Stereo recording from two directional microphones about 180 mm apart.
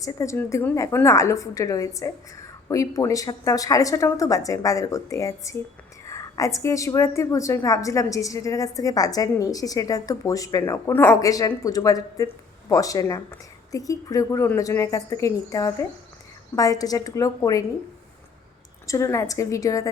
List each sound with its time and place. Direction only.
0.0 s a woman's voice: 15° left (ahead or behind)
18.9 s a woman's voice: 15° left (ahead or behind)